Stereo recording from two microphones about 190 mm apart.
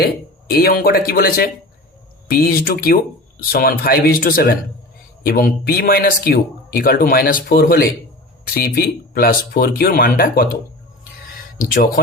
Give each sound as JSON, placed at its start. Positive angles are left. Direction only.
{"t": 0.5, "sound": "speech", "side_deg": 55}